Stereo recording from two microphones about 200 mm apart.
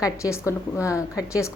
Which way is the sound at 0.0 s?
15° left (ahead or behind).